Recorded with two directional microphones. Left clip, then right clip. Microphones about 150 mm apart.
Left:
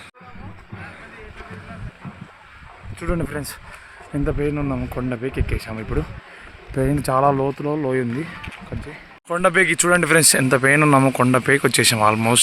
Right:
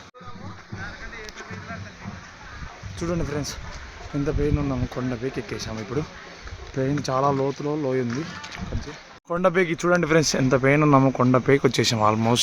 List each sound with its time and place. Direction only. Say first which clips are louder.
3.0 s speech: left 2 dB; 50° left (ahead or behind)
4.3 s speech: left 2 dB; 40° left (ahead or behind)
6.7 s speech: left 5 dB; 80° left; by 8.3 s 45° left (ahead or behind)
9.3 s speech: left 5 dB; centre (ahead or behind)